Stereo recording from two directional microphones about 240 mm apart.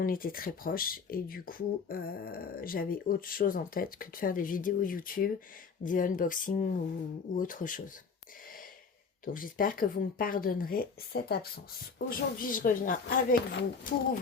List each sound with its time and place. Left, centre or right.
0.0 s speech: left
9.2 s speech: left